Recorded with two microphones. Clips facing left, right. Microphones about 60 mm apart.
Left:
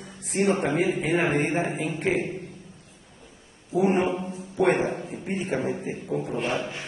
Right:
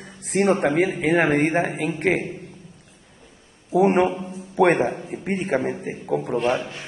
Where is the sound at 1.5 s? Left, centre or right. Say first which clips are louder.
Right 4 dB; right.